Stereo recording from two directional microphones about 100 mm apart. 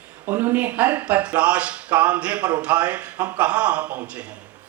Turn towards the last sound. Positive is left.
turn(degrees=-15)  # may be behind; listen again after turning